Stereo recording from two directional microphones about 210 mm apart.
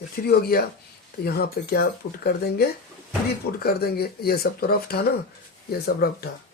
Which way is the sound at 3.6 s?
45° left (ahead or behind).